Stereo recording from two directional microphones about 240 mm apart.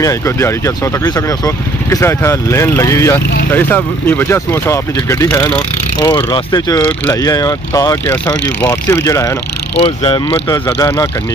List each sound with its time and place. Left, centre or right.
0.0 s speech: centre